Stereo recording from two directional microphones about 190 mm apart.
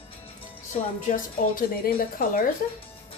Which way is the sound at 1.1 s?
50° left (ahead or behind).